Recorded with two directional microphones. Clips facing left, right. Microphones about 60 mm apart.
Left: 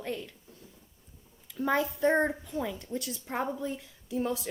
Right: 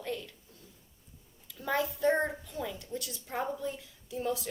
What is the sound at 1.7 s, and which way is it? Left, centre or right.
A woman's voice, left.